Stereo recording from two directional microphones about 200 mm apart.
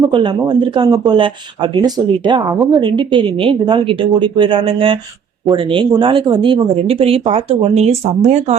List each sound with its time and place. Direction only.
0.1 s speech: 25° right (ahead or behind)